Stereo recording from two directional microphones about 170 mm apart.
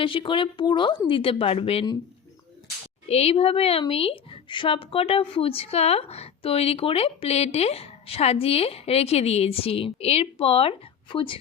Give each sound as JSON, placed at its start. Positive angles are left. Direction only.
{"t": 0.0, "sound": "a woman's voice", "side_deg": 30}
{"t": 3.1, "sound": "a woman's voice", "side_deg": 35}